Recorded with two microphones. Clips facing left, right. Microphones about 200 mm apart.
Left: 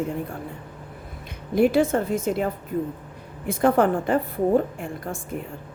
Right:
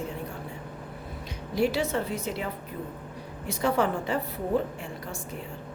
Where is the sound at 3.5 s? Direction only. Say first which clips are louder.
Left 7 dB; 50° left (ahead or behind).